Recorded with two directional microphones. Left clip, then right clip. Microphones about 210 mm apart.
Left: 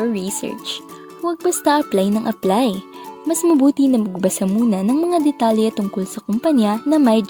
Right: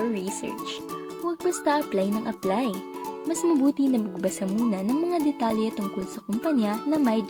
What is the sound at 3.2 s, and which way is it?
A woman's voice, 40° left (ahead or behind).